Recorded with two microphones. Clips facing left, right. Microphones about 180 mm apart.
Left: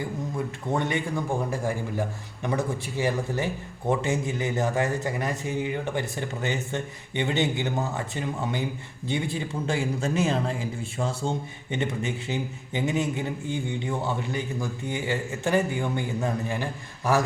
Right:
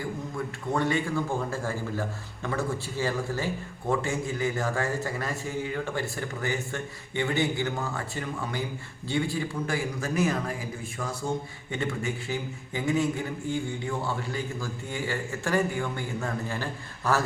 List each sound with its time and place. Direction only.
0.8 s a man's voice: 20° left (ahead or behind)